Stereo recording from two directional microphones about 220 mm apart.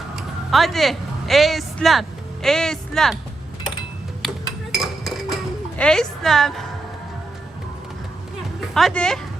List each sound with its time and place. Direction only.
0.2 s speech: centre (ahead or behind)
4.7 s dishes: centre (ahead or behind)
8.7 s speech: 5° left (ahead or behind)